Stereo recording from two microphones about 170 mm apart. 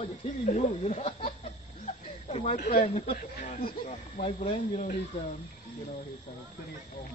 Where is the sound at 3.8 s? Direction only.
40° left (ahead or behind).